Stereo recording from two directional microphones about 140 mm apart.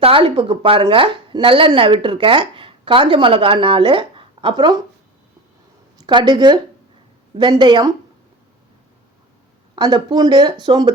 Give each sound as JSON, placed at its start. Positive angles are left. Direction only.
{"t": 0.0, "sound": "speech", "side_deg": -40}
{"t": 6.0, "sound": "speech", "side_deg": -35}
{"t": 9.7, "sound": "speech", "side_deg": -30}